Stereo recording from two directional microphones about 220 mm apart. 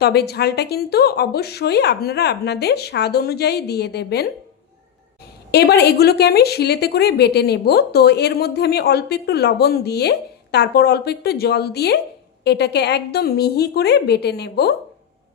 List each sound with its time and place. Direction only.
0.0 s a woman's voice: 45° left (ahead or behind)
5.5 s a woman's voice: 50° left (ahead or behind)